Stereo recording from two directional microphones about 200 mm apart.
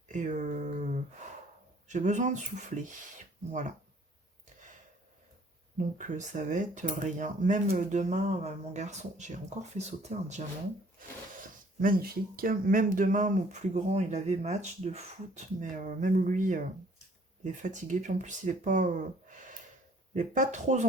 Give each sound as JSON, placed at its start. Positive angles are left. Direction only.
{"t": 0.1, "sound": "a sound", "side_deg": -40}
{"t": 1.9, "sound": "speech", "side_deg": -35}
{"t": 5.7, "sound": "speech", "side_deg": -40}
{"t": 11.8, "sound": "speech", "side_deg": -45}
{"t": 20.1, "sound": "speech", "side_deg": -40}